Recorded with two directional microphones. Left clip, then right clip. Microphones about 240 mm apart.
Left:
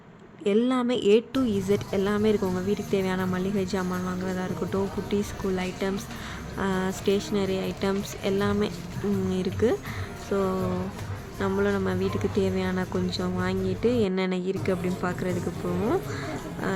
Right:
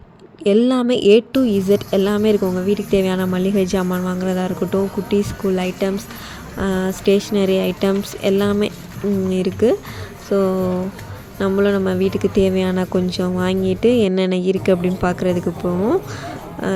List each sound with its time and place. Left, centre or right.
0.4 s speech: centre